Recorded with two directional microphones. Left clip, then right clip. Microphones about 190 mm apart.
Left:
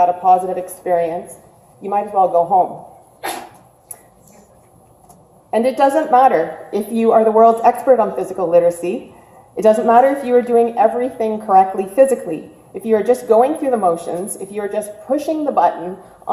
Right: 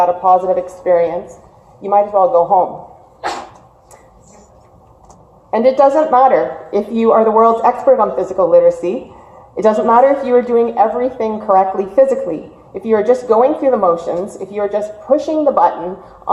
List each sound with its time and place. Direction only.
0.0 s a woman's voice: 35° left (ahead or behind)
5.5 s a woman's voice: 40° left (ahead or behind)